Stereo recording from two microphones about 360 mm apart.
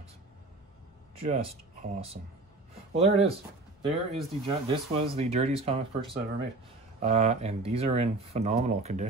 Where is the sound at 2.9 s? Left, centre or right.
Centre.